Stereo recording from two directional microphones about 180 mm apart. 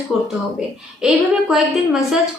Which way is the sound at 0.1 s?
5° right (ahead or behind).